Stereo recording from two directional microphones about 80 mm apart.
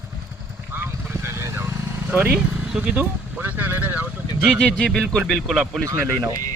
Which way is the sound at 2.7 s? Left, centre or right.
Centre.